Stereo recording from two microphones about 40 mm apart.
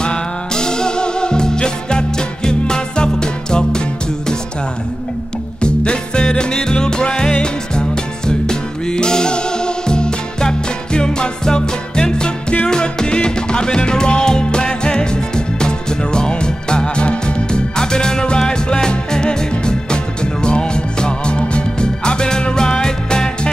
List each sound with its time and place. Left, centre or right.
0.0 s music: left
5.6 s music: left